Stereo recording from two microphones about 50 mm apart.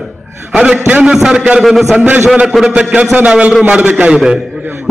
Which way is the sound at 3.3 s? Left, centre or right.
Right.